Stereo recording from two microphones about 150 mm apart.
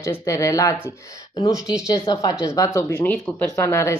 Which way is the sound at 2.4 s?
20° left (ahead or behind).